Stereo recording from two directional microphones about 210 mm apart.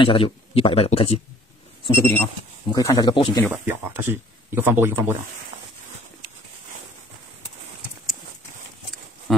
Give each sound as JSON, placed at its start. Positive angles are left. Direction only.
{"t": 0.0, "sound": "speech", "side_deg": 25}
{"t": 1.9, "sound": "speech", "side_deg": 10}
{"t": 3.5, "sound": "speech", "side_deg": -10}